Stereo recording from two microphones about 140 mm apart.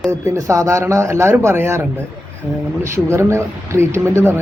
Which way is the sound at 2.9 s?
20° right (ahead or behind).